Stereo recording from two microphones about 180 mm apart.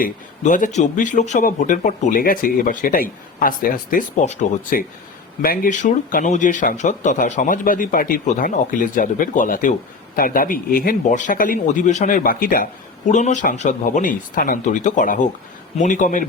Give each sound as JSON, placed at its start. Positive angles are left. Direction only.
{"t": 0.0, "sound": "a man's voice", "side_deg": 45}
{"t": 13.1, "sound": "a man's voice", "side_deg": 40}